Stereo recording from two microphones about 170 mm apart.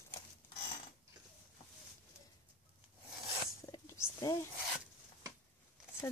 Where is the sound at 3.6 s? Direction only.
20° left (ahead or behind).